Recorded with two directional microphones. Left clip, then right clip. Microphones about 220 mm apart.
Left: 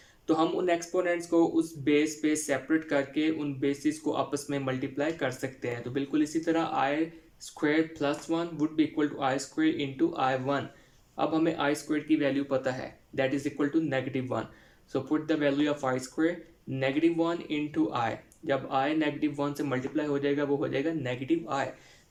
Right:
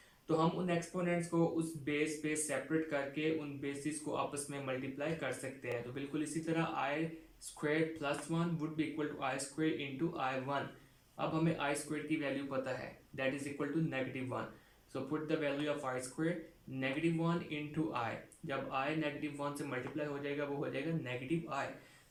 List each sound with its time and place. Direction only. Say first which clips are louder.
0.3 s speech: left 8 dB; 45° left (ahead or behind)